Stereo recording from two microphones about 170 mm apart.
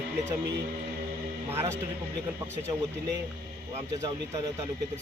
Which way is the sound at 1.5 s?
15° right (ahead or behind).